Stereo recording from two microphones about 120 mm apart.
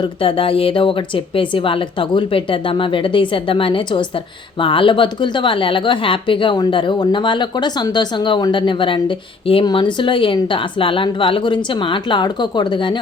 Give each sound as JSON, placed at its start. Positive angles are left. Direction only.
{"t": 0.0, "sound": "a woman's voice", "side_deg": 45}